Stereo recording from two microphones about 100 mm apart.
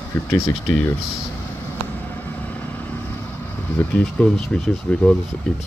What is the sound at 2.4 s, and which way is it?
Vehicle, 15° left (ahead or behind).